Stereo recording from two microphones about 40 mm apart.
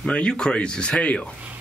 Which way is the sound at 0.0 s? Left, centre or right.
Left.